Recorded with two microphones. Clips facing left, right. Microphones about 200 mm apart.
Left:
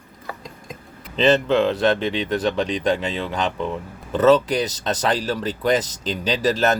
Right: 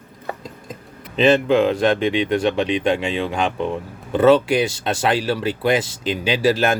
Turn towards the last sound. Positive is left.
turn(degrees=-10)  # may be behind; listen again after turning